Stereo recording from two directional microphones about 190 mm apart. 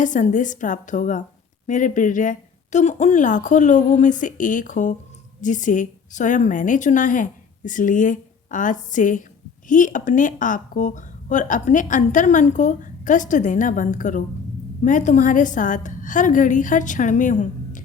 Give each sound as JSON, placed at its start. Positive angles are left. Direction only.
{"t": 0.0, "sound": "a woman's voice", "side_deg": 40}